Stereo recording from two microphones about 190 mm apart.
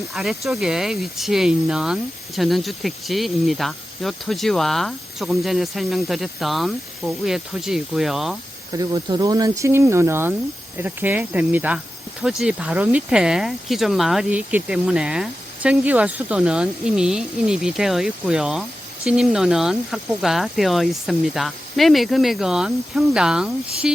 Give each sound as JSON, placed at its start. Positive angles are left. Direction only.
{"t": 0.1, "sound": "speech", "side_deg": 0}
{"t": 8.7, "sound": "speech", "side_deg": -20}